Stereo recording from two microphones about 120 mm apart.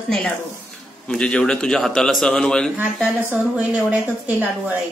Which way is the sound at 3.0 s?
10° right (ahead or behind).